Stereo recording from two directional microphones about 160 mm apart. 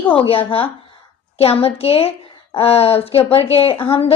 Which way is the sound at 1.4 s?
40° left (ahead or behind).